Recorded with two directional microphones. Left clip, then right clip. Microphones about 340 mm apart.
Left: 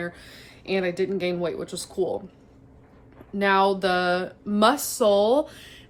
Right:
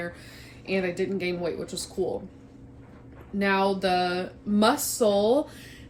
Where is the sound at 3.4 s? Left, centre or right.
Centre.